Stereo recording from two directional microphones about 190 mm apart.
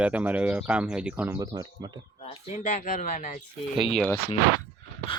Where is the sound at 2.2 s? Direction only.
30° left (ahead or behind).